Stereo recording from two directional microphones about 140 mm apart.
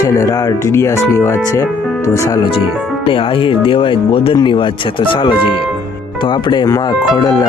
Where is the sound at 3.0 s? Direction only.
40° left (ahead or behind).